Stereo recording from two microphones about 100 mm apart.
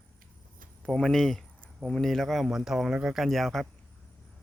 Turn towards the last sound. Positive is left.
turn(degrees=0)  # may be behind; listen again after turning